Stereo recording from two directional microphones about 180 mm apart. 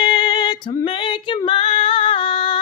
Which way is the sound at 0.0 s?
25° left (ahead or behind).